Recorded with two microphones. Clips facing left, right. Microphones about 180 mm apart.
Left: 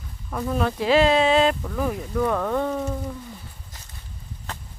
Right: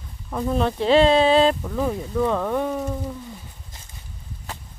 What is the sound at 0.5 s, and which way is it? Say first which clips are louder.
Speech: right 2 dB; 30° right (ahead or behind).